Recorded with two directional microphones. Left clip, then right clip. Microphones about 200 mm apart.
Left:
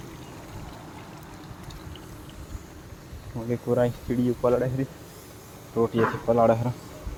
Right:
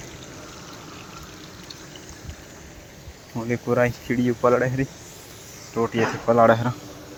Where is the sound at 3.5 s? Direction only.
Centre (ahead or behind).